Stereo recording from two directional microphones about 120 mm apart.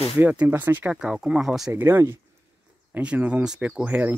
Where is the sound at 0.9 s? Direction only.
5° right (ahead or behind).